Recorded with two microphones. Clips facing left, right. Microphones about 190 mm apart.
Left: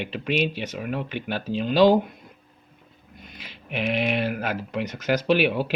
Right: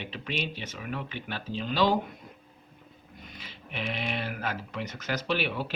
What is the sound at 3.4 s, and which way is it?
Speech, 70° left (ahead or behind).